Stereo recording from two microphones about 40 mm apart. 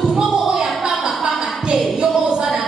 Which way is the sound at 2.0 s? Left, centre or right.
Centre.